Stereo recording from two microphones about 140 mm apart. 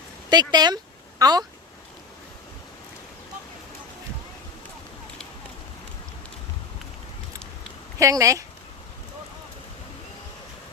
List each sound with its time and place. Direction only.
0.3 s speech: 30° right (ahead or behind)
7.9 s speech: 20° right (ahead or behind)